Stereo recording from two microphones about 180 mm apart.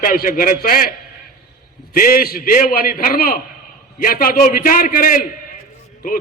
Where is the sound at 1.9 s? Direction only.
55° left (ahead or behind).